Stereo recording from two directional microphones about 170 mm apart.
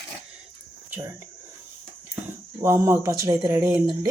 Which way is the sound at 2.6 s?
15° right (ahead or behind).